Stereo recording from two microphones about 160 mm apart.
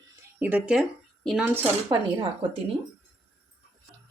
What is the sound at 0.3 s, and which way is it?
Speech, 10° right (ahead or behind).